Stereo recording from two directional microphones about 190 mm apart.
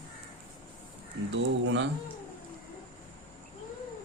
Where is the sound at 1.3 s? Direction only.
70° right (ahead or behind).